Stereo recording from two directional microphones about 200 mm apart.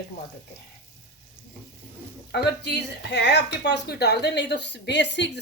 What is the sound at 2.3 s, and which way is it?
Speech, 55° left (ahead or behind).